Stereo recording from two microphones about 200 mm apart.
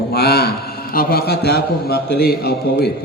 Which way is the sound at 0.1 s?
55° left (ahead or behind).